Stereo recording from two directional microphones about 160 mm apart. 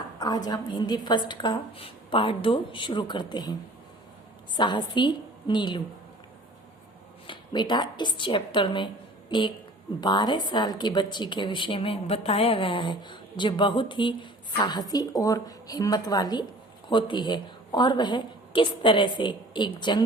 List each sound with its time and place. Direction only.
0.2 s speech: 25° left (ahead or behind)
4.5 s speech: 30° left (ahead or behind)
7.3 s speech: 30° left (ahead or behind)